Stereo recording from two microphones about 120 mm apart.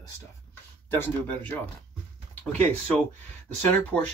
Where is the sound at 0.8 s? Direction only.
20° left (ahead or behind).